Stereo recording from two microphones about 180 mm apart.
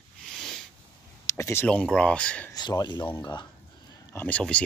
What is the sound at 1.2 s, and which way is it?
Speech, 15° left (ahead or behind).